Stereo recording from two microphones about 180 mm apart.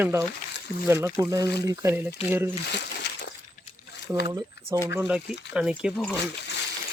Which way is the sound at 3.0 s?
65° left (ahead or behind).